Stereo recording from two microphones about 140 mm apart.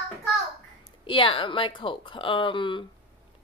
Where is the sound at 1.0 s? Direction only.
40° left (ahead or behind).